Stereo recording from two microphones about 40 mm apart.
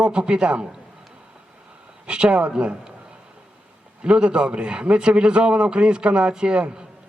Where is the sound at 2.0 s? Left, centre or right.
Right.